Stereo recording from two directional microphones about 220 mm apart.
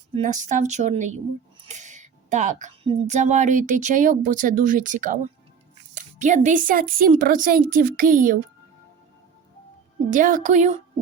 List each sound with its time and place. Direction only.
0.1 s a woman's voice: 35° right (ahead or behind)
10.1 s a woman's voice: 35° right (ahead or behind)